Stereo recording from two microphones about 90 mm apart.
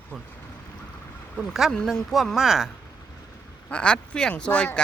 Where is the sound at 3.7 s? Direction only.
10° left (ahead or behind).